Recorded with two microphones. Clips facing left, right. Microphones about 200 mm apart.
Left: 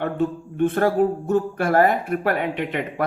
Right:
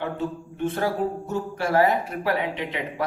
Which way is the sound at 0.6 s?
55° left (ahead or behind).